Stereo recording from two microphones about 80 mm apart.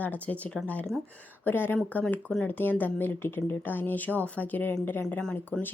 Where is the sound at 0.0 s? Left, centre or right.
Centre.